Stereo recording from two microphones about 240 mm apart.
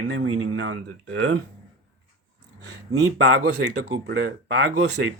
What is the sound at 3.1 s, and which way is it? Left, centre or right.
Speech, right.